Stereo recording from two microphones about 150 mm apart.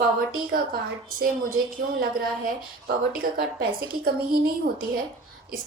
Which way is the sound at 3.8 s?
85° right.